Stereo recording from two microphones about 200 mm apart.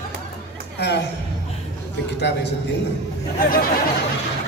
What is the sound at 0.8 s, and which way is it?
Speech, 60° left (ahead or behind).